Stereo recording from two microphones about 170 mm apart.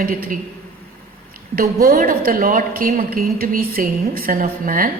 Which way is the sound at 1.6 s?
60° right (ahead or behind).